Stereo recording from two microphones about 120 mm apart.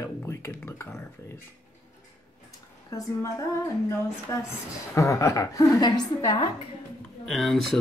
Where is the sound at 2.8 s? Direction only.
25° left (ahead or behind).